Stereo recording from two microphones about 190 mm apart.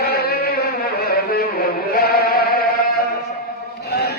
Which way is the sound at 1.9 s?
55° left (ahead or behind).